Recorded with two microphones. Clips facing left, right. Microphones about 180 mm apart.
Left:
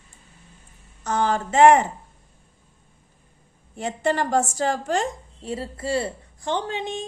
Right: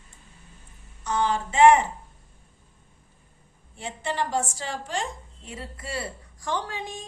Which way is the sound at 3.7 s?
45° left (ahead or behind).